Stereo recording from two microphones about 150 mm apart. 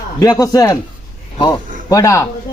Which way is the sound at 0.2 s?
20° left (ahead or behind).